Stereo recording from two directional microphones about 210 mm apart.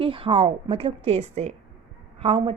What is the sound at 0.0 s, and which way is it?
A woman's voice, 25° right (ahead or behind).